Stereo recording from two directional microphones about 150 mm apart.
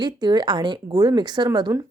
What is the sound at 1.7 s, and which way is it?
Speech, 15° right (ahead or behind).